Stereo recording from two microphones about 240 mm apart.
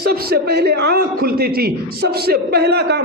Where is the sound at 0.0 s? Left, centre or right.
Right.